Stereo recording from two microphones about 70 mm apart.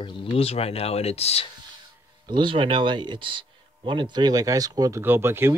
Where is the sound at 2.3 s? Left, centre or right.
Right.